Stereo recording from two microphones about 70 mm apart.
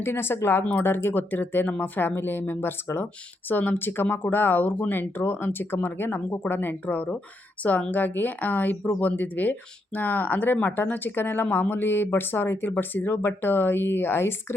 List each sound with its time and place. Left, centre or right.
0.0 s speech: left